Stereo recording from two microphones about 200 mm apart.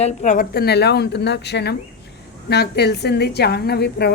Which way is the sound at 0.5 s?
55° left (ahead or behind).